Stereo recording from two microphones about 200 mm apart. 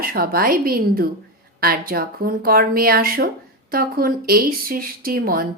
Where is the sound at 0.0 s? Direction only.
45° right (ahead or behind).